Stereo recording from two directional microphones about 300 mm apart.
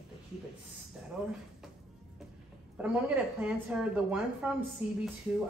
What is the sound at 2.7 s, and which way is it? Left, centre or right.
A woman's voice, centre.